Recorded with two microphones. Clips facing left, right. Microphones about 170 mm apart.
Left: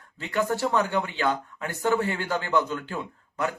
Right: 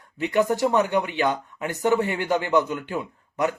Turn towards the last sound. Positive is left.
turn(degrees=-15)  # may be behind; listen again after turning